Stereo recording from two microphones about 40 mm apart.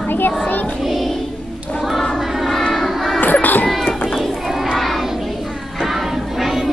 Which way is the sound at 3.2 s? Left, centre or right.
Left.